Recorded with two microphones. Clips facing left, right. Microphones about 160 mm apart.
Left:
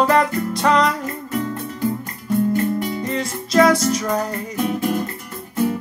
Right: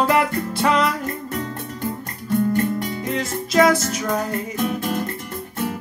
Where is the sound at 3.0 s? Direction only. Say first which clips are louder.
Left 1 dB; centre (ahead or behind).